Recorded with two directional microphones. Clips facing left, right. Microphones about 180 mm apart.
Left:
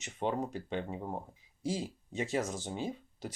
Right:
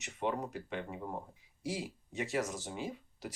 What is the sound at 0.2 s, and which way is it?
Speech, 25° left (ahead or behind).